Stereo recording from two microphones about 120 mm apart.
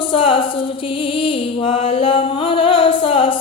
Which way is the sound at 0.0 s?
45° left (ahead or behind).